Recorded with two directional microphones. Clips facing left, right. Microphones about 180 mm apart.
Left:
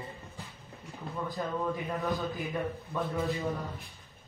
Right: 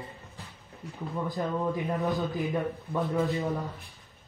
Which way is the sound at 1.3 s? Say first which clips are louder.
Right 3 dB; 20° right (ahead or behind).